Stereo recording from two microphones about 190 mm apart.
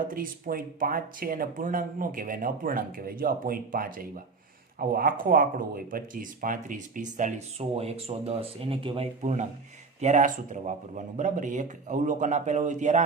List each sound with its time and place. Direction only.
0.1 s speech: 50° right (ahead or behind)